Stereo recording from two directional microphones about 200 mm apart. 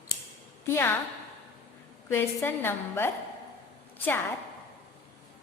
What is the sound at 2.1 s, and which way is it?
Speech, 10° left (ahead or behind).